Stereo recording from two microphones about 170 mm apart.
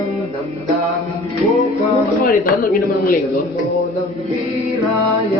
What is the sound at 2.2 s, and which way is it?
Speech, 55° left (ahead or behind).